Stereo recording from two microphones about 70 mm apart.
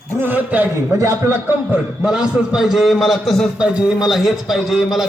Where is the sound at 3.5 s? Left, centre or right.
Centre.